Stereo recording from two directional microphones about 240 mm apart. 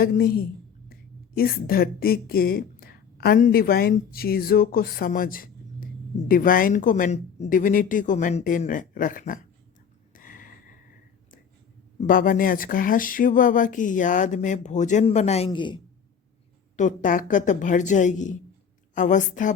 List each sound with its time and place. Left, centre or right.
0.0 s a woman's voice: left
10.2 s gasp: left
11.9 s a woman's voice: left; by 15.8 s centre
16.7 s a woman's voice: left